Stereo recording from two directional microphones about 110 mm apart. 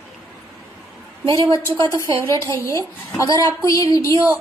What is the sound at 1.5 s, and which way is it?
Speech, 25° left (ahead or behind).